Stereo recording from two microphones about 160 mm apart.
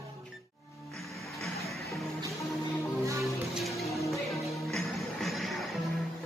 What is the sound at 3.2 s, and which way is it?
Music, centre (ahead or behind).